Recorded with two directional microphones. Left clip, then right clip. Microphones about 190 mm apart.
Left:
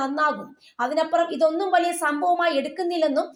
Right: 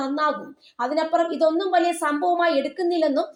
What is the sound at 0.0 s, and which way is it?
A woman's voice, 25° left (ahead or behind).